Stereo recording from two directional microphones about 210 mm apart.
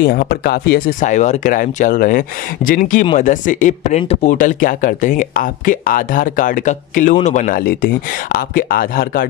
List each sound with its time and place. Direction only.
0.0 s speech: 45° left (ahead or behind)